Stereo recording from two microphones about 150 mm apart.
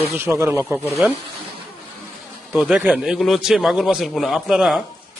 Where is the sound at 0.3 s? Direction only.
20° right (ahead or behind).